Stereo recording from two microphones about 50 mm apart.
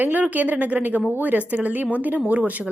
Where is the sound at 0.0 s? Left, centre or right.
Right.